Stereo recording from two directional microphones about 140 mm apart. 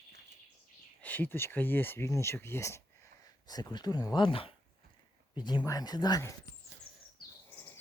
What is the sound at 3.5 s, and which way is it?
Speech, 30° left (ahead or behind).